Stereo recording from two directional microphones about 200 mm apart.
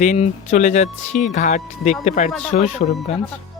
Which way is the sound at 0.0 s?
35° left (ahead or behind).